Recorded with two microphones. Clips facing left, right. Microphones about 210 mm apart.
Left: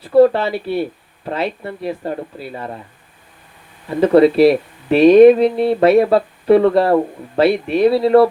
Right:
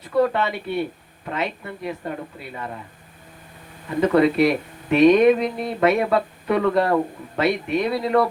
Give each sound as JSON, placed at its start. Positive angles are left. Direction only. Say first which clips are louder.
{"t": 0.0, "sound": "speech", "louder": "left 8 dB", "side_deg": 35}
{"t": 3.8, "sound": "speech", "louder": "left 6 dB", "side_deg": 35}